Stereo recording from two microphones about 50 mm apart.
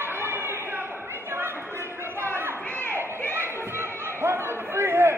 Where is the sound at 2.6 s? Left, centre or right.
Left.